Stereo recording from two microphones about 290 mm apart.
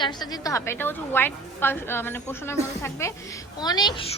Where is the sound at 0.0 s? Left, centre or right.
Centre.